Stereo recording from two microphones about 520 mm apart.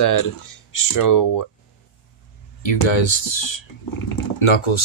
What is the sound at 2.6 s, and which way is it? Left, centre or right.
Speech, left.